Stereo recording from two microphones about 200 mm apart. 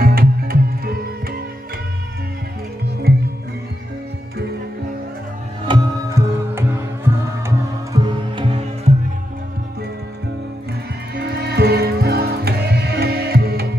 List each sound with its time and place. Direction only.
0.0 s music: 50° right (ahead or behind)
5.7 s music: 15° right (ahead or behind)
11.1 s music: 50° right (ahead or behind)